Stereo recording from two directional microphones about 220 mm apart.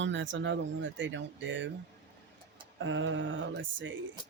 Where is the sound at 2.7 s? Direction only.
60° right (ahead or behind).